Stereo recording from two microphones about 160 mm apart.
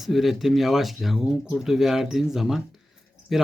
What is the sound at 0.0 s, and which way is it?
Speech, centre (ahead or behind).